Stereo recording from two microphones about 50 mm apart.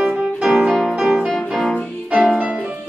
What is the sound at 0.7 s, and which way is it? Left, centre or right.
Music, centre.